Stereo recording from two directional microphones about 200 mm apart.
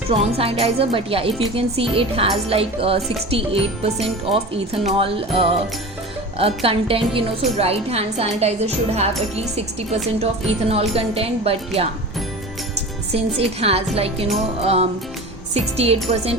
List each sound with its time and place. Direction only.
0.1 s a woman's voice: 30° right (ahead or behind)
13.1 s a woman's voice: 30° right (ahead or behind)